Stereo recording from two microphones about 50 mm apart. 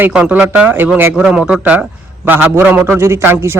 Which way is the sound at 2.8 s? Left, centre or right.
Right.